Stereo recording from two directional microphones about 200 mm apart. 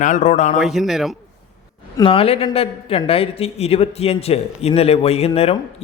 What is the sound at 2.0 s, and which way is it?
A woman's voice, 30° left (ahead or behind).